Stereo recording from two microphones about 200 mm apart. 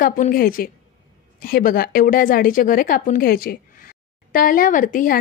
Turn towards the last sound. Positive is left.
turn(degrees=45)  # may be behind; listen again after turning